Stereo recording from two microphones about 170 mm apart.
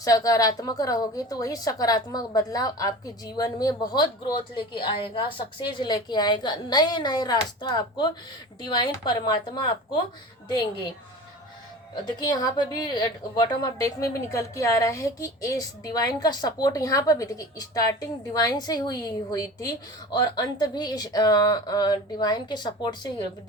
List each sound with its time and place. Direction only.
0.0 s a woman's voice: 20° left (ahead or behind)
12.0 s a woman's voice: 25° left (ahead or behind)